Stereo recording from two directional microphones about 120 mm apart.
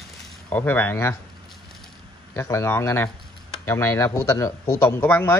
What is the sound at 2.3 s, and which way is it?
Speech, 25° left (ahead or behind).